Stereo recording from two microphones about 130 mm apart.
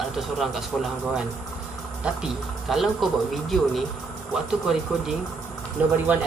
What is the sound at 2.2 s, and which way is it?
Speech, centre (ahead or behind).